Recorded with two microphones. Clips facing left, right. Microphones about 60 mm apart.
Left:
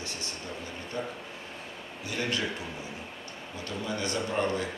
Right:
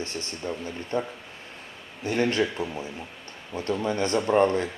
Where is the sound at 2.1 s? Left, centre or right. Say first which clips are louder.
Right 8 dB; right.